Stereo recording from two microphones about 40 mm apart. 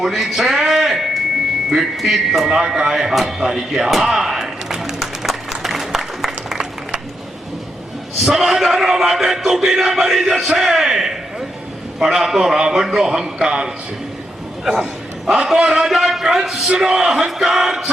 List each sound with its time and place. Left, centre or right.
0.0 s a sound: centre
8.2 s a man's voice: centre
14.6 s a man's voice: centre
15.5 s a man's voice: right
15.9 s a man's voice: centre
16.6 s a man's voice: centre